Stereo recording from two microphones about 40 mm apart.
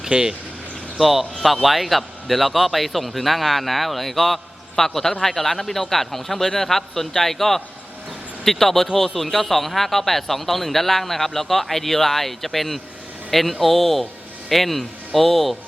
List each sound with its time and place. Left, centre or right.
0.1 s speech: centre
0.9 s speech: centre